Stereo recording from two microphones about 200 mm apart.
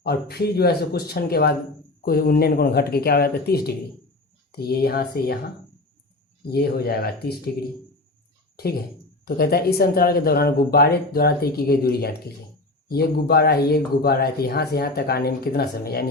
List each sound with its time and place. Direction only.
0.0 s speech: 55° left (ahead or behind)
6.5 s speech: 50° left (ahead or behind)
9.2 s speech: 50° left (ahead or behind)